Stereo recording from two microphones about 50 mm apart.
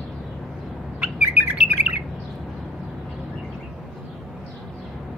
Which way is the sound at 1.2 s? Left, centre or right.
Right.